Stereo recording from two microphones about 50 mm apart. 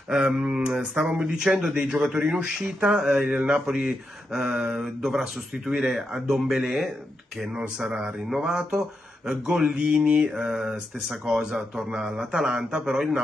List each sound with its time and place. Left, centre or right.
0.3 s speech: centre
3.2 s mantra: right
3.4 s speech: centre
4.5 s speech: right
4.7 s speech: centre
10.0 s mantra: right
11.2 s speech: centre